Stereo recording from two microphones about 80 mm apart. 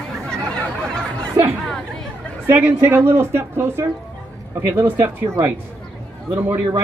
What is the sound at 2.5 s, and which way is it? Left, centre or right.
Speech, right.